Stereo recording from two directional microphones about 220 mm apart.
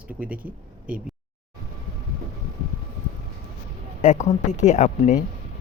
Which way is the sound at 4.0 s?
35° left (ahead or behind).